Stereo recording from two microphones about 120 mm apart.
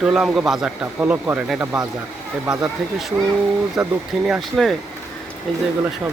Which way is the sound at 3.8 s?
5° right (ahead or behind).